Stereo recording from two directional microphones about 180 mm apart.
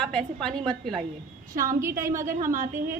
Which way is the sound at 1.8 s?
15° right (ahead or behind).